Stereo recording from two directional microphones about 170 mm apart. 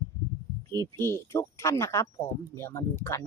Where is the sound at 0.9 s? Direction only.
15° left (ahead or behind).